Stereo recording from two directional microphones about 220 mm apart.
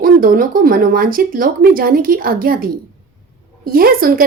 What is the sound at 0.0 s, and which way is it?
Speech, 40° right (ahead or behind).